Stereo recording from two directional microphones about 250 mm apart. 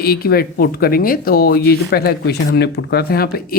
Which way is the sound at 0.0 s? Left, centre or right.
Left.